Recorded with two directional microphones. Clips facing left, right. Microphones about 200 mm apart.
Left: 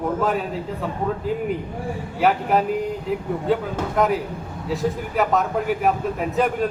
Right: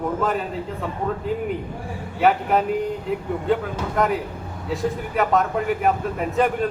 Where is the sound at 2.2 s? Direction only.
Centre (ahead or behind).